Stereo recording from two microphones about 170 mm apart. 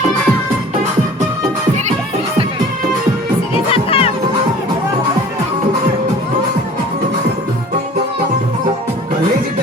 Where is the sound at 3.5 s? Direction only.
35° left (ahead or behind).